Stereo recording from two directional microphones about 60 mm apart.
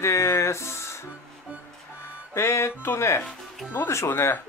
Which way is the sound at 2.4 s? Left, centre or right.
Left.